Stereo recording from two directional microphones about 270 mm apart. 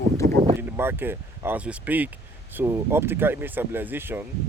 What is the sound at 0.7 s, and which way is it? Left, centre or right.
Speech, centre.